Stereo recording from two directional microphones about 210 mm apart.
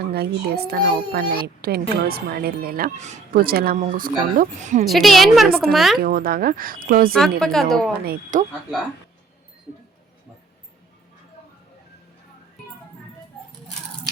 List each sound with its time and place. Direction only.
0.1 s a child's voice: 50° right (ahead or behind)
4.9 s a woman's voice: centre (ahead or behind)
6.0 s a child's voice: 45° right (ahead or behind)
7.2 s a woman's voice: centre (ahead or behind)
8.0 s a child's voice: 40° right (ahead or behind)